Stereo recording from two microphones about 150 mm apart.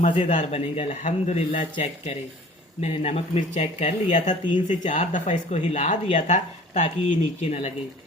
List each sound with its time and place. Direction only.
0.0 s speech: 50° left (ahead or behind)